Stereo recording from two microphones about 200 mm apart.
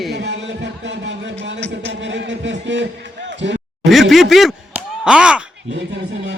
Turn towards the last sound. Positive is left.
turn(degrees=-5)  # may be behind; listen again after turning